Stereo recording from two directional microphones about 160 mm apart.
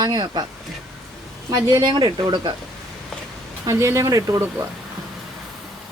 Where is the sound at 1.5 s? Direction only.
20° right (ahead or behind).